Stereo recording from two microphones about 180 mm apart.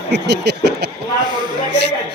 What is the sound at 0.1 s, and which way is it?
Speech, 70° right (ahead or behind).